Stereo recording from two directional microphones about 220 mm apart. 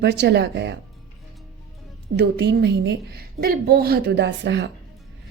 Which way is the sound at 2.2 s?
45° right (ahead or behind).